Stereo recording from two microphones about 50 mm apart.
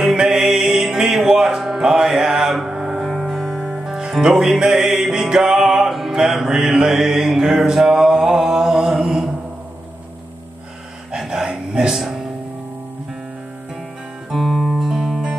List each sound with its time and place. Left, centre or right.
0.0 s music: centre
11.1 s a sound: centre
14.3 s music: centre